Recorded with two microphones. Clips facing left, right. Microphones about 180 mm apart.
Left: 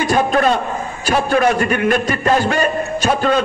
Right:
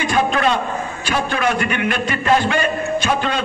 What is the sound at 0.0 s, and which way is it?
A man's voice, 40° left (ahead or behind).